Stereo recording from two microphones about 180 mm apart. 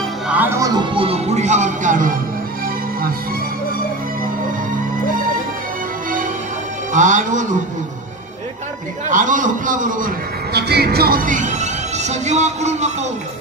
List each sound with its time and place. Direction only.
0.3 s music: 10° right (ahead or behind); by 2.1 s 45° right (ahead or behind)
6.9 s a man's voice: 45° right (ahead or behind)
9.1 s a man's voice: 45° right (ahead or behind)